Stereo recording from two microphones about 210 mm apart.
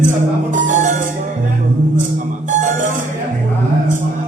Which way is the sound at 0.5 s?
40° right (ahead or behind).